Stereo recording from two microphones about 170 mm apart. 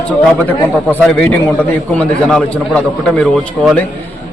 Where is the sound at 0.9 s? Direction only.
10° left (ahead or behind).